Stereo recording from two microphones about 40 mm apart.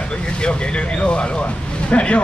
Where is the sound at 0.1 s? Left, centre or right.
Left.